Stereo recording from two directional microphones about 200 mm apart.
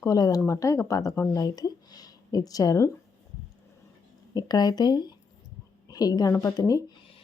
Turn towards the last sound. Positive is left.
turn(degrees=15)  # may be behind; listen again after turning